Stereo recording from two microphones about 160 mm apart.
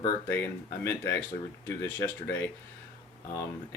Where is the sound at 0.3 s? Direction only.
15° left (ahead or behind).